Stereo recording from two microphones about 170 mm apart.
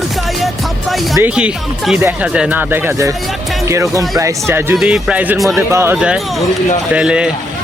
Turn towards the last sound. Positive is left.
turn(degrees=-5)  # may be behind; listen again after turning